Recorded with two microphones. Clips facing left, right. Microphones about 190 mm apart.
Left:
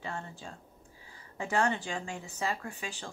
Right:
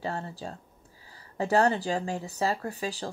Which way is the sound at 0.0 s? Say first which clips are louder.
Right 6 dB; 35° right (ahead or behind).